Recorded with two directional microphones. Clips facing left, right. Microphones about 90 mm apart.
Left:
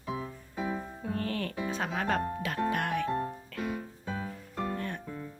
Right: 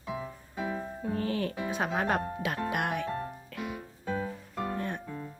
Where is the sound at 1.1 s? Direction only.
15° right (ahead or behind).